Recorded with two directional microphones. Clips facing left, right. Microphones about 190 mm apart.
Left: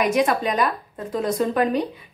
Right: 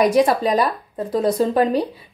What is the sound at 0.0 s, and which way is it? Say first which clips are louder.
A woman's voice: right 4 dB; 35° right (ahead or behind).